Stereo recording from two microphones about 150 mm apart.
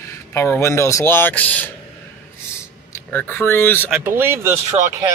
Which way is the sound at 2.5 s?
15° left (ahead or behind).